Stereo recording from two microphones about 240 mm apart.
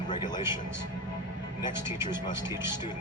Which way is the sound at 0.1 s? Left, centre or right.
Centre.